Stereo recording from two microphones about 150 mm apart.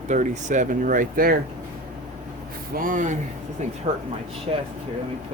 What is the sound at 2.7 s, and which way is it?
Speech, 65° right (ahead or behind).